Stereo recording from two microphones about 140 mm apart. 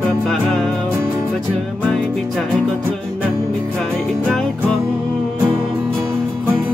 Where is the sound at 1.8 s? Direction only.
5° left (ahead or behind).